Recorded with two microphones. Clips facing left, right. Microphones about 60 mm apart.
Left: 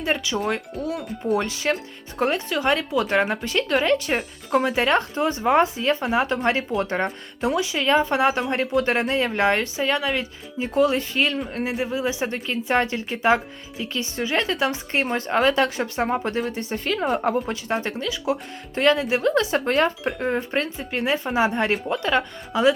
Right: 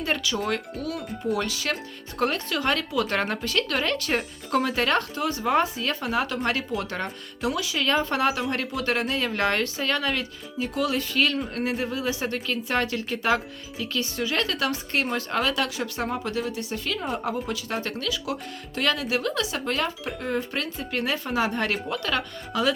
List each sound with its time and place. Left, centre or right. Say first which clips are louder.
0.0 s a woman's voice: left 3 dB; left
10.6 s a woman's voice: left 6 dB; left
17.5 s a woman's voice: left 4 dB; left